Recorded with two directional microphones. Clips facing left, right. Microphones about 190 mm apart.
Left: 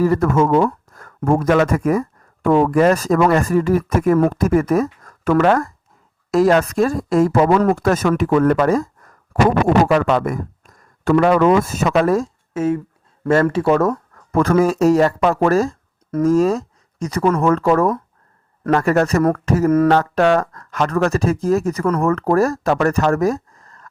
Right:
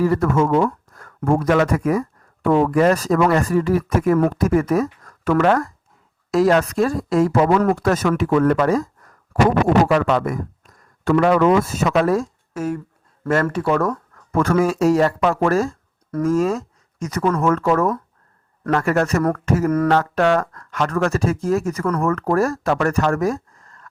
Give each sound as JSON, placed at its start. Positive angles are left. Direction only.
{"t": 0.0, "sound": "speech", "side_deg": 45}
{"t": 12.5, "sound": "speech", "side_deg": 25}
{"t": 14.3, "sound": "speech", "side_deg": 35}